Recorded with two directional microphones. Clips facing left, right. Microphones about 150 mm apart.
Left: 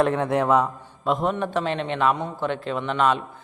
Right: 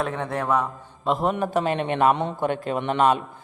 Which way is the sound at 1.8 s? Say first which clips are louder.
Right 4 dB; 50° right (ahead or behind).